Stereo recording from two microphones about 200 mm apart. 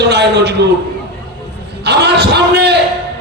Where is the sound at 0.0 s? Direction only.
55° right (ahead or behind).